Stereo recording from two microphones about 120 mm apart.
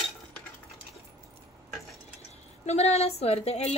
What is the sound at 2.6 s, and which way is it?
A woman's voice, 65° left (ahead or behind).